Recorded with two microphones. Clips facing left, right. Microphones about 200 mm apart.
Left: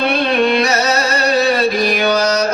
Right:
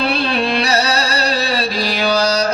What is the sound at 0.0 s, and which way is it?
Music, 30° right (ahead or behind).